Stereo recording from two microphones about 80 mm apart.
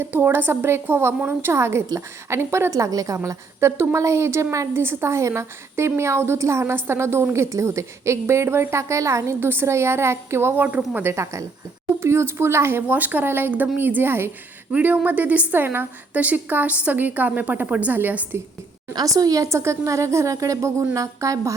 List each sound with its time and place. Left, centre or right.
0.0 s a woman's voice: right
3.2 s a woman's voice: right
11.1 s a woman's voice: right
12.9 s a woman's voice: right
14.7 s a woman's voice: centre
18.9 s a woman's voice: right